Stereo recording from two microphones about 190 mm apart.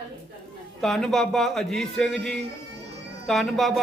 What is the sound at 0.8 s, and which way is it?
Speech, centre (ahead or behind).